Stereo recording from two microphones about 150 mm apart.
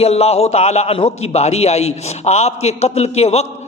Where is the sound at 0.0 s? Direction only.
45° left (ahead or behind).